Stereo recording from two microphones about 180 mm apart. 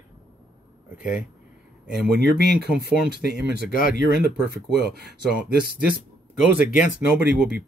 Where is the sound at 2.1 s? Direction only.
60° right (ahead or behind).